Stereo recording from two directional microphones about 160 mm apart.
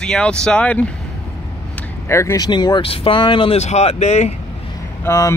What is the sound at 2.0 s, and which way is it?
Speech, 15° left (ahead or behind).